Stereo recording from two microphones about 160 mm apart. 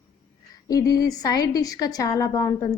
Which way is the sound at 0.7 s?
20° left (ahead or behind).